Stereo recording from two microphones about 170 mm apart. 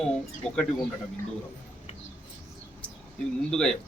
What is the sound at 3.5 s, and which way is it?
Speech, 5° left (ahead or behind).